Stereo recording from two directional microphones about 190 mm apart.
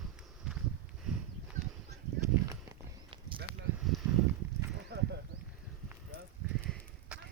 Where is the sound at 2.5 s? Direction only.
25° right (ahead or behind).